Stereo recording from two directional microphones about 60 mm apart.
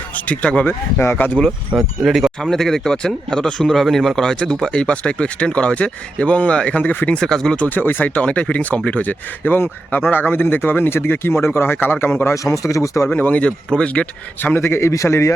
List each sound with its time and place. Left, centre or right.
0.3 s speech: left
1.5 s speech: centre
2.4 s speech: centre; by 7.2 s left
7.2 s speech: centre
7.5 s speech: left
12.3 s speech: left
13.1 s speech: left
14.4 s a man's voice: left